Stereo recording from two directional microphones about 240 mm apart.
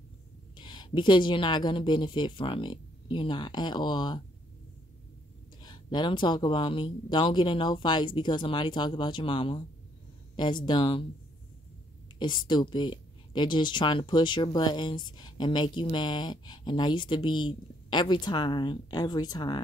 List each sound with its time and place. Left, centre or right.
0.6 s speech: centre
5.6 s speech: centre
12.2 s speech: centre